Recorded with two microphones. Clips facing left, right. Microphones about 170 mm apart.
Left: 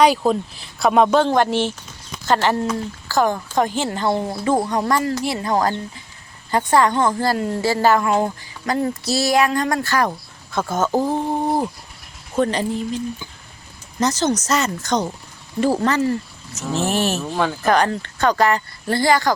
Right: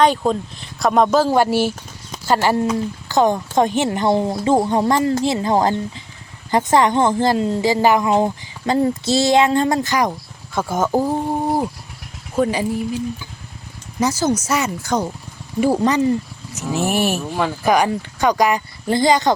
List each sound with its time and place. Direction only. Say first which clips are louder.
0.0 s a man's voice: even; 10° left (ahead or behind); by 13.0 s 10° right (ahead or behind)
14.0 s speech: right 1 dB; 10° right (ahead or behind)